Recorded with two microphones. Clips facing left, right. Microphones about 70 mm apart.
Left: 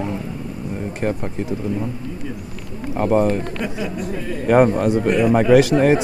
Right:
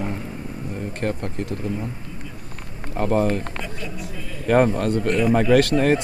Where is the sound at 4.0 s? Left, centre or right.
Left.